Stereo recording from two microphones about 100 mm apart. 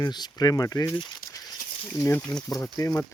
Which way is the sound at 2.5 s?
35° left (ahead or behind).